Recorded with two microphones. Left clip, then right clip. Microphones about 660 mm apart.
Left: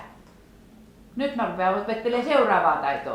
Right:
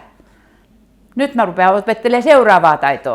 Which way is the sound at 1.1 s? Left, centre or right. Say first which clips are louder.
Right 11 dB; right.